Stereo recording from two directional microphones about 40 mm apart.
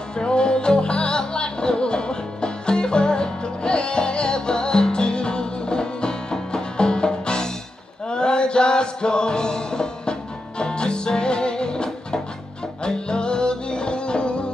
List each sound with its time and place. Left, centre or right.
0.2 s music: left